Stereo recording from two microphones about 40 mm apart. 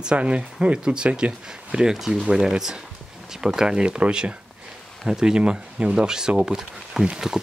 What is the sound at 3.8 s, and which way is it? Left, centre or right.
Speech, right.